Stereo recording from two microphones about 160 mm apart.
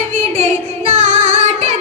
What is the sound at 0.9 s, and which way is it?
Music, 45° right (ahead or behind).